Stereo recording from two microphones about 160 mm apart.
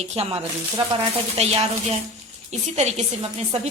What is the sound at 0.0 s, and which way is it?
A woman's voice, 40° right (ahead or behind).